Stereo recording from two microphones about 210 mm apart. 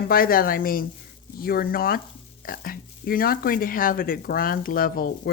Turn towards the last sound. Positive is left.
turn(degrees=45)  # may be behind; listen again after turning